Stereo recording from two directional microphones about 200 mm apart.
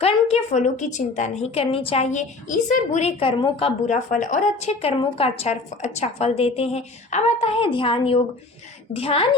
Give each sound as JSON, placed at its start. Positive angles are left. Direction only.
{"t": 0.0, "sound": "a woman's voice", "side_deg": 30}